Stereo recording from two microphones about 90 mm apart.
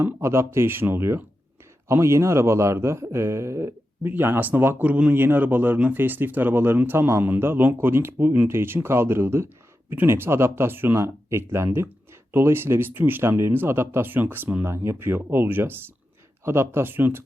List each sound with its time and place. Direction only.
0.0 s a man's voice: 30° right (ahead or behind)